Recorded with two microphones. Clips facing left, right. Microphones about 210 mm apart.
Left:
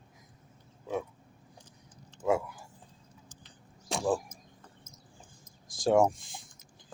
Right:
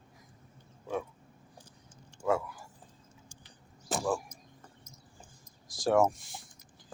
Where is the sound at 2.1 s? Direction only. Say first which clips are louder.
Left 2 dB; 10° right (ahead or behind).